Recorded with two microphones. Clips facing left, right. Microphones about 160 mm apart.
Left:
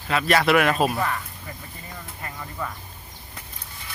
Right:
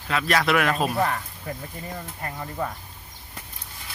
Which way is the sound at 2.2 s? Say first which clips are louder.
Right 3 dB; 40° right (ahead or behind).